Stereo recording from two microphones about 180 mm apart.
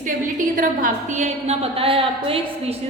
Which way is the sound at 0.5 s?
45° right (ahead or behind).